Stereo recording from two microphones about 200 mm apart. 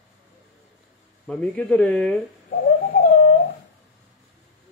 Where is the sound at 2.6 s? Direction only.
45° left (ahead or behind).